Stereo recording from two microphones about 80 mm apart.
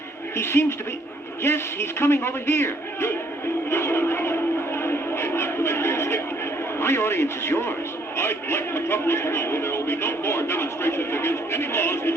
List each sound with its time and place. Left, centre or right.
0.3 s a man's voice: left
3.7 s a sound: left
6.7 s a man's voice: left